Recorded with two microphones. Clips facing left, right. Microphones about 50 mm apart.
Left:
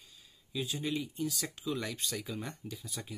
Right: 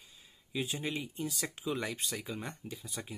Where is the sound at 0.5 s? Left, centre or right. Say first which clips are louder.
Even; right.